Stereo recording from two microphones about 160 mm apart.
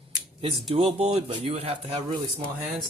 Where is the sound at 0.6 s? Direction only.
35° right (ahead or behind).